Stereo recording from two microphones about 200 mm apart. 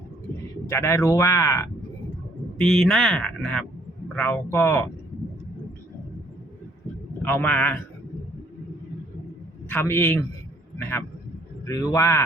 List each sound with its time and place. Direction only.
0.7 s speech: 15° left (ahead or behind)
2.6 s speech: centre (ahead or behind)
7.2 s speech: 10° left (ahead or behind)
9.6 s speech: 10° left (ahead or behind)